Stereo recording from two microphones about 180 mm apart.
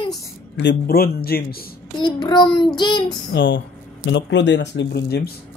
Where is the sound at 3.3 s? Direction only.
90° left; by 5.3 s 65° left (ahead or behind).